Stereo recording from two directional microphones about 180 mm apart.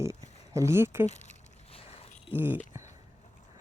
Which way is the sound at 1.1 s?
40° left (ahead or behind).